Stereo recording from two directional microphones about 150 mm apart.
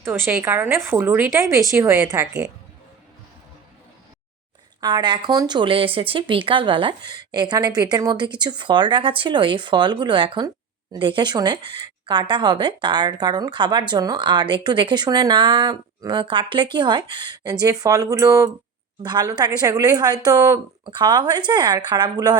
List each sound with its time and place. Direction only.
0.0 s a woman's voice: 15° right (ahead or behind)
4.8 s speech: 30° right (ahead or behind)